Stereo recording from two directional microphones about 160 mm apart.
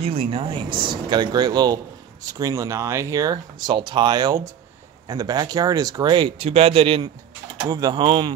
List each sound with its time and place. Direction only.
0.0 s speech: 35° right (ahead or behind)